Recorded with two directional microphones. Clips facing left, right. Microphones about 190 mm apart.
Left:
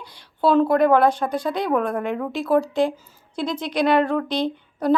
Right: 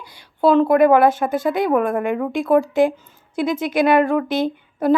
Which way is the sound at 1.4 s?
50° right (ahead or behind).